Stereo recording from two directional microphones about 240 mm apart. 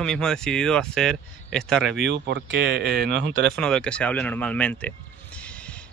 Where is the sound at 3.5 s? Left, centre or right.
Centre.